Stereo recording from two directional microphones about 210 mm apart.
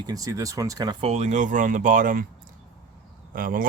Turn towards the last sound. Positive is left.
turn(degrees=-40)  # may be behind; listen again after turning